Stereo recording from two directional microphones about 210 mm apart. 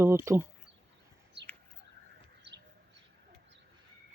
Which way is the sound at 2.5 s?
55° right (ahead or behind).